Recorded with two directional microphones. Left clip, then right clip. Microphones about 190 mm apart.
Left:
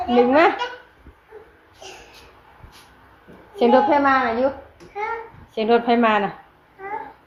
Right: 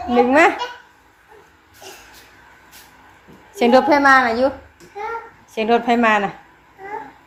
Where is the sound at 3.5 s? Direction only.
15° right (ahead or behind).